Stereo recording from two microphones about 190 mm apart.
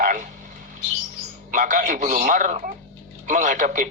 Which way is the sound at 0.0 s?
45° right (ahead or behind).